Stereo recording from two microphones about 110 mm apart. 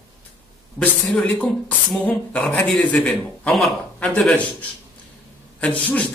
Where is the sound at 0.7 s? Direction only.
10° left (ahead or behind).